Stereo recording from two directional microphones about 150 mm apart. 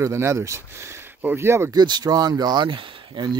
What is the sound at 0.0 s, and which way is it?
Speech, 15° right (ahead or behind).